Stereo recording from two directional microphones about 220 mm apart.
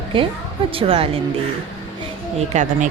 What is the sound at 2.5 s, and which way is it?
Speech, 35° right (ahead or behind).